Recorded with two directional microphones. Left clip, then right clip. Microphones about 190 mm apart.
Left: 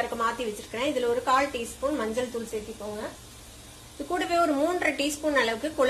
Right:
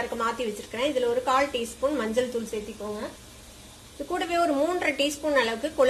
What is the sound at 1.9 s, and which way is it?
Speech, 25° right (ahead or behind).